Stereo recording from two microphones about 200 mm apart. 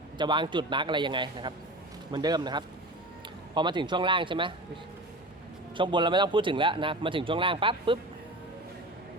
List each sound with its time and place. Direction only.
0.2 s speech: 25° right (ahead or behind)
5.7 s speech: 25° right (ahead or behind)